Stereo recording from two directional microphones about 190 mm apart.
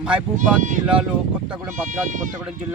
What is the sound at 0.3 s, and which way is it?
Speech, 40° right (ahead or behind).